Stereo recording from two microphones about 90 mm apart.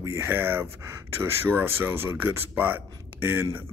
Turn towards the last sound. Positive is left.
turn(degrees=-25)  # may be behind; listen again after turning